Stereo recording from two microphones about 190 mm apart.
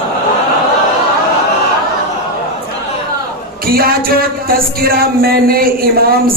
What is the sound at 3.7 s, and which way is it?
Speech, 50° right (ahead or behind).